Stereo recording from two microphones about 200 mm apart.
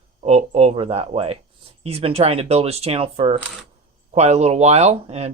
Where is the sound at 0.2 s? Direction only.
30° right (ahead or behind).